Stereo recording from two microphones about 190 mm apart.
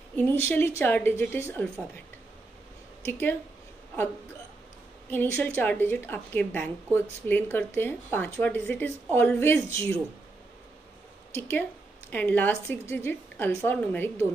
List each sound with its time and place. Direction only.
0.3 s a woman's voice: 10° left (ahead or behind)
3.1 s a woman's voice: 10° left (ahead or behind)
5.1 s a woman's voice: 10° left (ahead or behind)
11.3 s a woman's voice: 10° left (ahead or behind)